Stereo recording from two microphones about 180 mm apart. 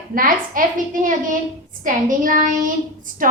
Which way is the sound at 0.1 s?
50° right (ahead or behind).